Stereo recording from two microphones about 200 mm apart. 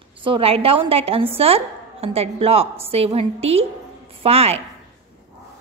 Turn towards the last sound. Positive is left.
turn(degrees=-30)  # may be behind; listen again after turning